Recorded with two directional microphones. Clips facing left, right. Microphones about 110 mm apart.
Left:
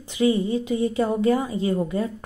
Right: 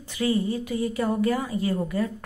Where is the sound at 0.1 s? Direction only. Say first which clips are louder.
Left 4 dB; 20° left (ahead or behind).